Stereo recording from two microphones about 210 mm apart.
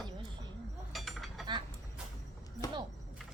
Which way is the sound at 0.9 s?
Centre (ahead or behind).